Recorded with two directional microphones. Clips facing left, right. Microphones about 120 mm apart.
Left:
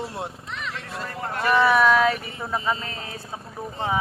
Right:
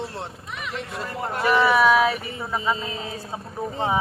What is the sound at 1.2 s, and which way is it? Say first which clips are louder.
Speech: even; 15° right (ahead or behind).